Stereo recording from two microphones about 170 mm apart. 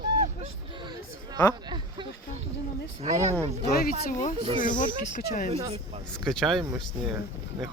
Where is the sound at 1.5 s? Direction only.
25° right (ahead or behind).